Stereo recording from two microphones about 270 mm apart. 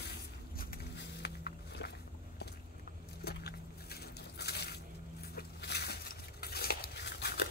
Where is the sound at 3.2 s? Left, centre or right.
Left.